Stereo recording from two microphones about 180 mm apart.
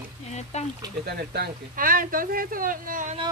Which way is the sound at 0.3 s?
40° left (ahead or behind).